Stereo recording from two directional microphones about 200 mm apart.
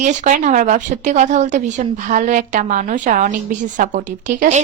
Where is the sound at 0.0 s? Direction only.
35° right (ahead or behind).